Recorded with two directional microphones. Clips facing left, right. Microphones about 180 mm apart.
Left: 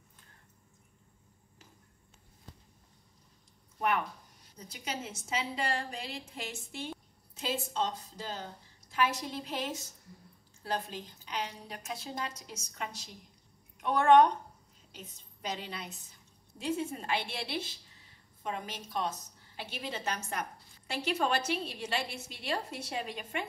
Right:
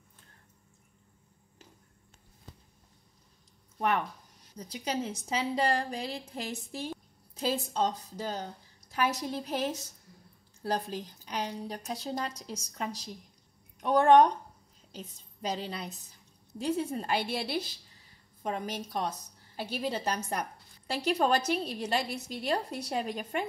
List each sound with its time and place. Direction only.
5.6 s a woman's voice: 40° right (ahead or behind)
15.4 s a woman's voice: 35° right (ahead or behind)